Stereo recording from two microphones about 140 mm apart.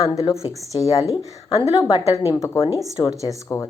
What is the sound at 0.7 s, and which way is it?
Speech, 25° left (ahead or behind).